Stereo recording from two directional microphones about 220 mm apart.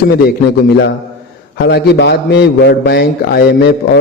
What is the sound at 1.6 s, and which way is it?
A man's voice, 50° left (ahead or behind).